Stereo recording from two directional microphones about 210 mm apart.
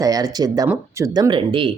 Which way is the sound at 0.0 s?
15° right (ahead or behind).